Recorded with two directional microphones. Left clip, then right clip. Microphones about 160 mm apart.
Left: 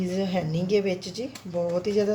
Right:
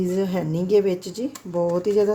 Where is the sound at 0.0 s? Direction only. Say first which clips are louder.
Right 4 dB; 50° right (ahead or behind).